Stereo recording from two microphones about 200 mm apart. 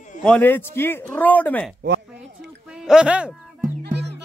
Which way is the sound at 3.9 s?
55° right (ahead or behind).